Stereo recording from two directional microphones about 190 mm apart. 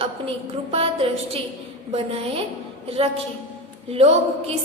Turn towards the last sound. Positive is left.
turn(degrees=-30)  # may be behind; listen again after turning